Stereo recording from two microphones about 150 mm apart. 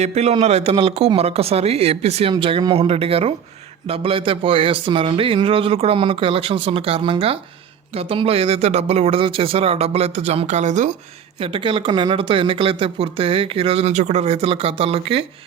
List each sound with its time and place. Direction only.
0.0 s speech: 45° right (ahead or behind)
11.3 s speech: 35° right (ahead or behind)